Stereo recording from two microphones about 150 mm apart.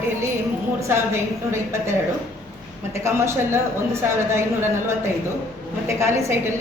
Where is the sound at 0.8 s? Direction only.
20° right (ahead or behind).